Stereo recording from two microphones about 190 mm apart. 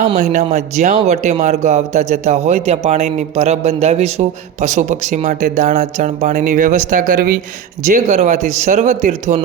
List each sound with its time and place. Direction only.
0.2 s speech: 40° right (ahead or behind)